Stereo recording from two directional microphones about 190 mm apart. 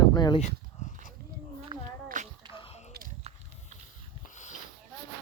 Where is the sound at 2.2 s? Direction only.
40° right (ahead or behind).